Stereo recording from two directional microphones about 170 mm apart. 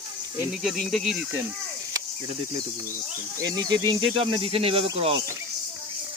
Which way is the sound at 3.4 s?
20° right (ahead or behind).